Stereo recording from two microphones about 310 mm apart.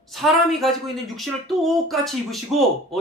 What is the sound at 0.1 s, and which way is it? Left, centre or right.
Speech, centre.